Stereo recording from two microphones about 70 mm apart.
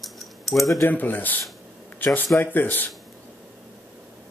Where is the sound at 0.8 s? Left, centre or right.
Left.